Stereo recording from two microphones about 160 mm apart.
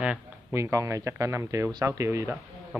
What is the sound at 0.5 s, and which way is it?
Speech, 20° right (ahead or behind).